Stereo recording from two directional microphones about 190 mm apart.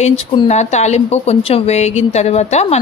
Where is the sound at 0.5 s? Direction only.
35° left (ahead or behind).